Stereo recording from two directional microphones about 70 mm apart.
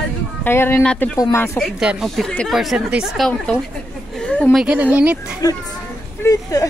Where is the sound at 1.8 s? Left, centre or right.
Centre.